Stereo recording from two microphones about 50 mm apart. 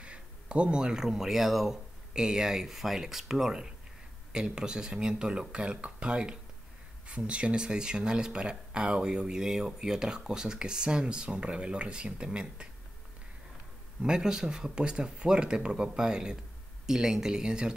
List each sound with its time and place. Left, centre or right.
0.0 s speech: right
14.0 s speech: centre